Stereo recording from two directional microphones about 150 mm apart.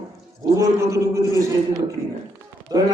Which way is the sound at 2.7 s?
25° right (ahead or behind).